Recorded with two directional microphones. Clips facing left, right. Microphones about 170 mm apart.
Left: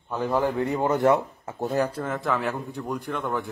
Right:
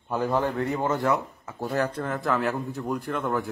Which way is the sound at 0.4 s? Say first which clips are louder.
Left 2 dB; 10° left (ahead or behind).